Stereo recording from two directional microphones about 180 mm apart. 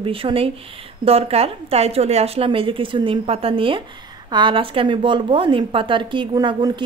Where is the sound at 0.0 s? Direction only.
30° right (ahead or behind).